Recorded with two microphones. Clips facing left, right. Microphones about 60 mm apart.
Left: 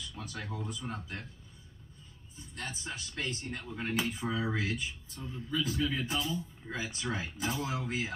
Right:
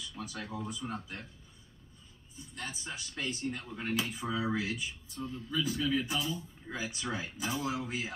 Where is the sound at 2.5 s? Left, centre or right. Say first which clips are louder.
Left 1 dB; centre.